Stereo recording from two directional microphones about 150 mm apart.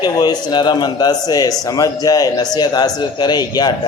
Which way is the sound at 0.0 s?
25° left (ahead or behind).